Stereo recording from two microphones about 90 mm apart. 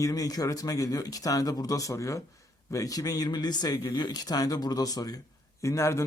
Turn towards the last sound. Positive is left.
turn(degrees=30)  # may be behind; listen again after turning